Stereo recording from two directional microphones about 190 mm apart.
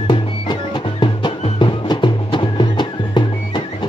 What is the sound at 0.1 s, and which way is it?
Music, 25° left (ahead or behind).